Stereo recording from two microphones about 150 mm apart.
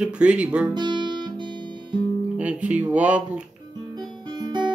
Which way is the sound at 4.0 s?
30° right (ahead or behind).